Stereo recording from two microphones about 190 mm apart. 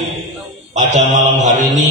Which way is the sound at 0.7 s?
40° right (ahead or behind).